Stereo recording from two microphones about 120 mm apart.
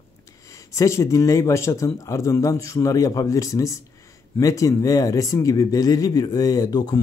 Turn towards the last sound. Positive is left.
turn(degrees=35)  # may be behind; listen again after turning